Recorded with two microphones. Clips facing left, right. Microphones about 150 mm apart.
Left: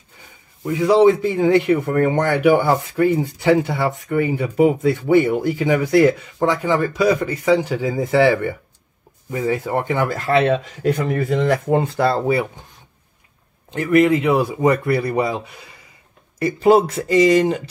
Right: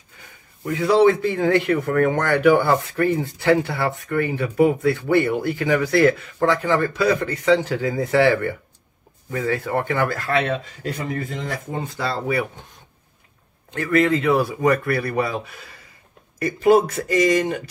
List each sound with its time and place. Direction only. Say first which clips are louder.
0.7 s speech: left 3 dB; 15° left (ahead or behind)
11.1 s speech: left 9 dB; 70° left (ahead or behind); by 12.2 s 55° left (ahead or behind)
13.7 s speech: left 4 dB; 15° left (ahead or behind)